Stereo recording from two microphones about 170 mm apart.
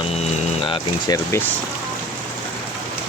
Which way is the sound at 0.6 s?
30° left (ahead or behind).